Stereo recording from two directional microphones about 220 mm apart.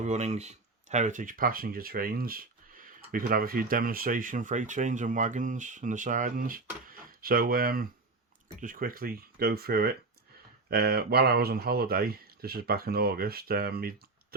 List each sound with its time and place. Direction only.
0.0 s speech: 30° right (ahead or behind)